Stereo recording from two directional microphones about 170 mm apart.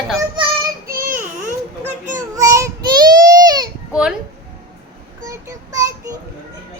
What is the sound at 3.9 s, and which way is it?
Speech, 5° right (ahead or behind).